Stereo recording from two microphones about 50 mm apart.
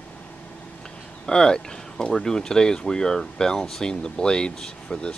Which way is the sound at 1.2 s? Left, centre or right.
Centre.